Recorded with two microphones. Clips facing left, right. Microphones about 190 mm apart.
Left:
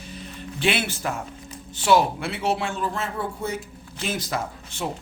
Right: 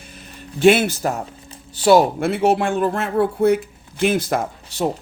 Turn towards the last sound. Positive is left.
turn(degrees=-35)  # may be behind; listen again after turning